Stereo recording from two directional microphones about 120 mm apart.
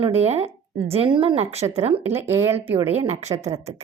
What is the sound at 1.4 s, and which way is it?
Speech, 60° right (ahead or behind).